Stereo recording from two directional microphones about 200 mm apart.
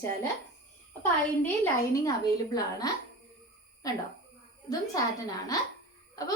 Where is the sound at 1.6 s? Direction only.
20° left (ahead or behind).